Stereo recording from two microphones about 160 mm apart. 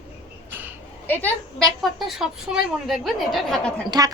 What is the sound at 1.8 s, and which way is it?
A woman's voice, centre (ahead or behind).